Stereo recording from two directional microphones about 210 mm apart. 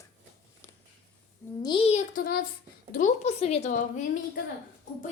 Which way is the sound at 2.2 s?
45° left (ahead or behind).